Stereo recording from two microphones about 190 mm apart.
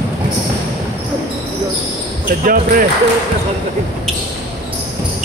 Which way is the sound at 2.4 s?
45° right (ahead or behind).